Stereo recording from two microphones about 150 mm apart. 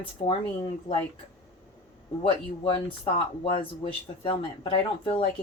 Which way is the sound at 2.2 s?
35° left (ahead or behind).